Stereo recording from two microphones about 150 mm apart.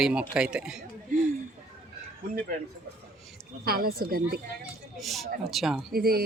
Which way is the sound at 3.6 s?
90° right.